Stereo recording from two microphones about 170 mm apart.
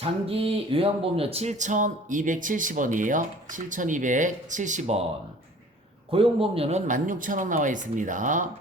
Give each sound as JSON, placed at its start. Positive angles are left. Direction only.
{"t": 0.0, "sound": "speech", "side_deg": -35}
{"t": 6.1, "sound": "speech", "side_deg": -30}